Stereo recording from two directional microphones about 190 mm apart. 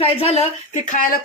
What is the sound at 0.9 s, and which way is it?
Speech, 45° left (ahead or behind).